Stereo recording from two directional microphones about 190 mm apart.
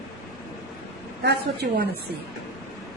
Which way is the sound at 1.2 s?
60° right (ahead or behind).